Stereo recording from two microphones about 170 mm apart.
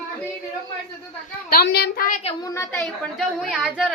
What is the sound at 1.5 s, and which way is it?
Speech, 65° left (ahead or behind).